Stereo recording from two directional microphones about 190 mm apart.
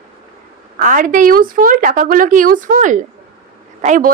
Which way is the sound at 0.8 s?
45° right (ahead or behind).